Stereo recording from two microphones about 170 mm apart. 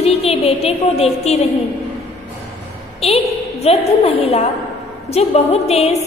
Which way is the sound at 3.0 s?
35° left (ahead or behind).